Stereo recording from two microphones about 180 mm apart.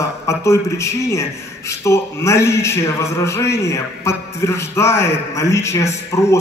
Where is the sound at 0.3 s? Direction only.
15° left (ahead or behind).